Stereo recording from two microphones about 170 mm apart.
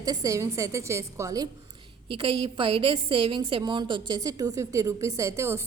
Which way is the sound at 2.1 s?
30° right (ahead or behind).